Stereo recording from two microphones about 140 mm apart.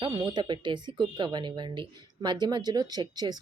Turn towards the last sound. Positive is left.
turn(degrees=-30)  # may be behind; listen again after turning